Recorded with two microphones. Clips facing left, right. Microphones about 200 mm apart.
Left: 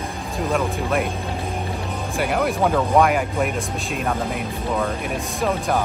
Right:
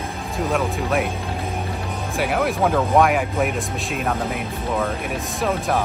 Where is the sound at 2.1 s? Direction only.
Centre (ahead or behind).